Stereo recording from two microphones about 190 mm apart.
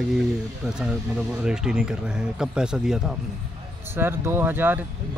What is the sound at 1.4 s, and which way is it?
Speech, 5° right (ahead or behind).